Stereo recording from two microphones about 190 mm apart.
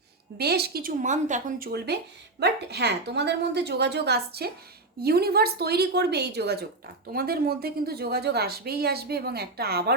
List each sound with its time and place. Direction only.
0.3 s speech: 55° right (ahead or behind)